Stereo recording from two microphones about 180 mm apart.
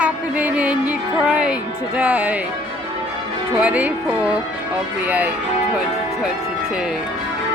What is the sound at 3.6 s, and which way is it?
Speech, 5° right (ahead or behind).